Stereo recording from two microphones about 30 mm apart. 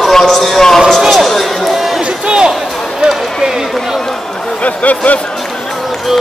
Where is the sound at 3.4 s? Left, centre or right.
Centre.